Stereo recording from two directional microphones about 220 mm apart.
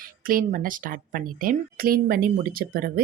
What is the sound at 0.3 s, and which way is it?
Speech, 40° right (ahead or behind).